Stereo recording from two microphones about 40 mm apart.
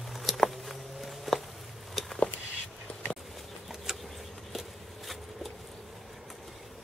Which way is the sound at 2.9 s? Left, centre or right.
Left.